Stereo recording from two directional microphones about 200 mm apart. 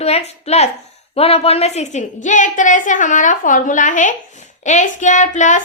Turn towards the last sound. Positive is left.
turn(degrees=35)  # may be behind; listen again after turning